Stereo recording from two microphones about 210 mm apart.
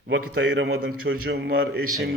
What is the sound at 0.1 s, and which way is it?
Speech, 60° right (ahead or behind).